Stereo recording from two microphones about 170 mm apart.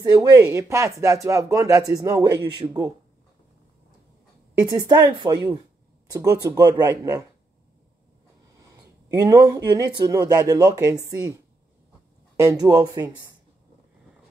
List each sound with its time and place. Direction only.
0.0 s speech: 20° right (ahead or behind)
4.6 s speech: 25° right (ahead or behind)
9.2 s speech: 20° right (ahead or behind)
12.4 s speech: 20° right (ahead or behind)